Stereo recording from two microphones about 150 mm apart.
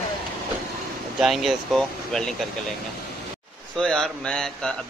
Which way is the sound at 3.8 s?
5° left (ahead or behind).